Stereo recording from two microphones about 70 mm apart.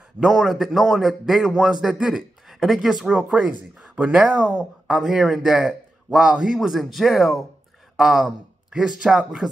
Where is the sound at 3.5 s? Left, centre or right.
Centre.